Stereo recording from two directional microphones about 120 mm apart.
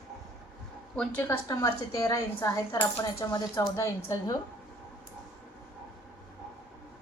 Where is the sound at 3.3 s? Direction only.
30° left (ahead or behind).